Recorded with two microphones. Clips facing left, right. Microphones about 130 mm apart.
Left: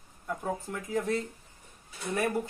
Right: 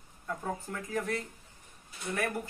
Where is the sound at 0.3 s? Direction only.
15° left (ahead or behind).